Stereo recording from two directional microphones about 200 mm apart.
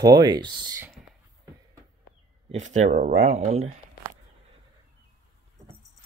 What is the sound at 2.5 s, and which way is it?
Speech, 35° right (ahead or behind).